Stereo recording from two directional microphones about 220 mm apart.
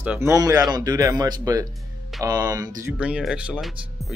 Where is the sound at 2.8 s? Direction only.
5° right (ahead or behind).